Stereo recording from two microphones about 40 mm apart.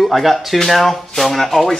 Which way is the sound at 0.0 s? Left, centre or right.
Centre.